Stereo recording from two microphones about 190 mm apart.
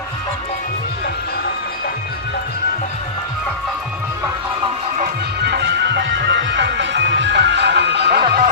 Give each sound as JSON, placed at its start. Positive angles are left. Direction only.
{"t": 5.4, "sound": "music", "side_deg": -60}